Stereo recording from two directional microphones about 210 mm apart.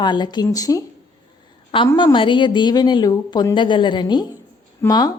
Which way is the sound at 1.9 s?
20° left (ahead or behind).